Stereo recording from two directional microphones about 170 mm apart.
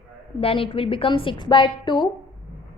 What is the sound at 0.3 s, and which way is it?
A woman's voice, 35° left (ahead or behind).